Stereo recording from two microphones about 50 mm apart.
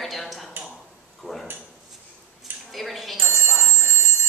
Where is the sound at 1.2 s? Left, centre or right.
Centre.